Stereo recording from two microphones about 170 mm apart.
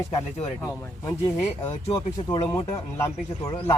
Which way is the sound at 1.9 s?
25° left (ahead or behind).